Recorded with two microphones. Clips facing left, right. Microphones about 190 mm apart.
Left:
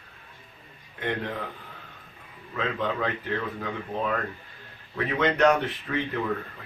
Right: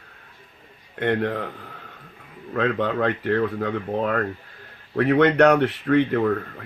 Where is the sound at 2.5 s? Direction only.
65° right (ahead or behind).